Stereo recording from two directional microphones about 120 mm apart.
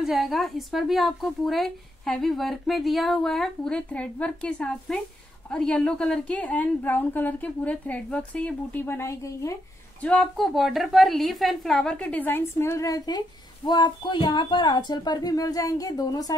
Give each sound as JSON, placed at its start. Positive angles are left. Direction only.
{"t": 0.0, "sound": "a woman's voice", "side_deg": 0}
{"t": 10.0, "sound": "a woman's voice", "side_deg": 5}